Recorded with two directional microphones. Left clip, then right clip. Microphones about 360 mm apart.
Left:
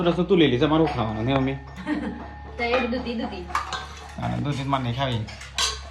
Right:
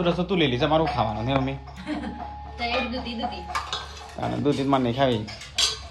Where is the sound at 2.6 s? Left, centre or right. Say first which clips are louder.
Left 3 dB; centre.